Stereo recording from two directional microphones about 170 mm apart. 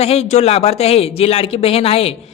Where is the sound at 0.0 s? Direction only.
40° left (ahead or behind).